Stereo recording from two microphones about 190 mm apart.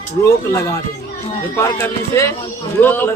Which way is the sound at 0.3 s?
15° left (ahead or behind).